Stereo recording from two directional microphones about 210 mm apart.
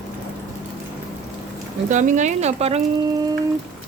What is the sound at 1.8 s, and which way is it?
Speech, 35° right (ahead or behind).